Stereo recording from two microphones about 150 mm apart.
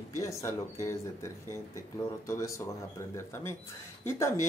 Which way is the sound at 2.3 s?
20° left (ahead or behind).